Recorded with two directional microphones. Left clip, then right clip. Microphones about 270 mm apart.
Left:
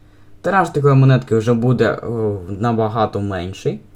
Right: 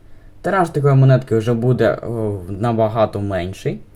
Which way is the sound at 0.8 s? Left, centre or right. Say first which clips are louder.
Left 1 dB; centre.